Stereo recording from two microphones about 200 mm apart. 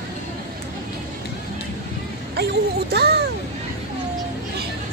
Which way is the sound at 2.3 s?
55° right (ahead or behind).